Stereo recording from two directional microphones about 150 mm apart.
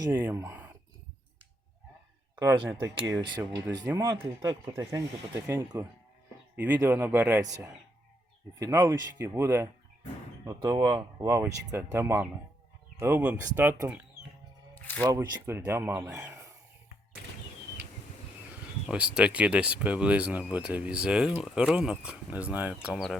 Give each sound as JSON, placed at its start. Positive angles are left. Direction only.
{"t": 0.0, "sound": "speech", "side_deg": -20}
{"t": 2.3, "sound": "speech", "side_deg": -25}
{"t": 8.5, "sound": "speech", "side_deg": -20}
{"t": 14.8, "sound": "music", "side_deg": 10}
{"t": 15.0, "sound": "speech", "side_deg": -25}
{"t": 18.9, "sound": "speech", "side_deg": -5}